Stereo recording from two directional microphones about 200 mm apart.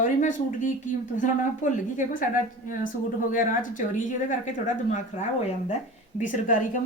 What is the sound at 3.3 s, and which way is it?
A woman's voice, 40° left (ahead or behind).